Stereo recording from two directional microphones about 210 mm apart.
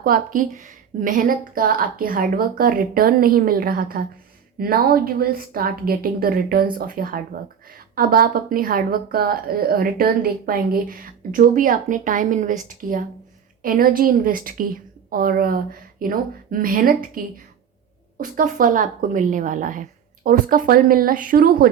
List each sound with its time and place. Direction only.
0.0 s a woman's voice: 40° right (ahead or behind)